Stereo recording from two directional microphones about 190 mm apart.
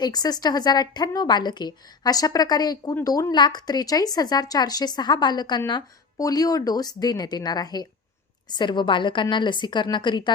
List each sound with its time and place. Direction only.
0.0 s a woman's voice: 20° left (ahead or behind)